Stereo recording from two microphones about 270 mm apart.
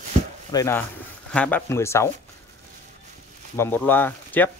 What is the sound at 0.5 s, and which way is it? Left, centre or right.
Speech, centre.